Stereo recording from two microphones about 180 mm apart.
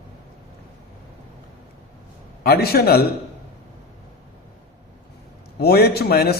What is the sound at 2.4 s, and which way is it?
Speech, 60° left (ahead or behind).